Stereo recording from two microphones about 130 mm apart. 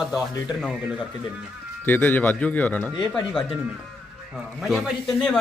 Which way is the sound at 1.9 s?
15° left (ahead or behind).